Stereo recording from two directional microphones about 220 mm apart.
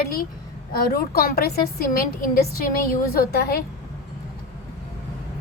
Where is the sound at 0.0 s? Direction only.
40° left (ahead or behind).